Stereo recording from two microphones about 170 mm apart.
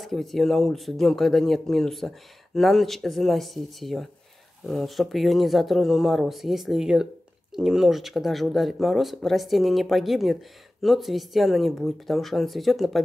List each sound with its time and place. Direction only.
0.0 s speech: centre (ahead or behind)